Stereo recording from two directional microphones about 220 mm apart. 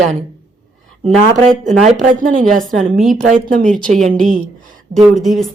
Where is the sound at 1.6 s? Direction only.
35° right (ahead or behind).